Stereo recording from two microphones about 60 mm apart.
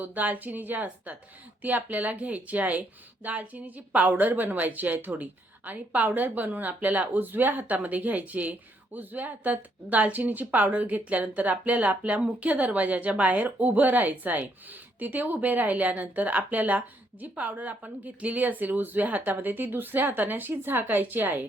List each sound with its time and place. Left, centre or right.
0.0 s a woman's voice: right